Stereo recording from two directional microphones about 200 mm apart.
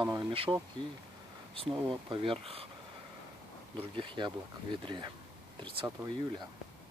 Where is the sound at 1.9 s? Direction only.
25° right (ahead or behind).